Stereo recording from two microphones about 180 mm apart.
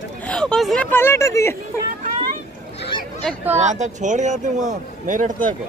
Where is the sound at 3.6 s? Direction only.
40° right (ahead or behind).